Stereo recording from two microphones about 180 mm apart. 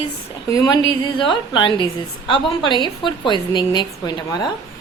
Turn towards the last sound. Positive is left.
turn(degrees=25)  # may be behind; listen again after turning